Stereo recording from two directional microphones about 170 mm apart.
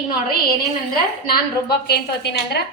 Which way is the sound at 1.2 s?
70° left (ahead or behind).